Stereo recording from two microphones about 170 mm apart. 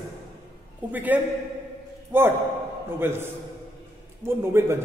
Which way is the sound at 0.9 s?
10° right (ahead or behind).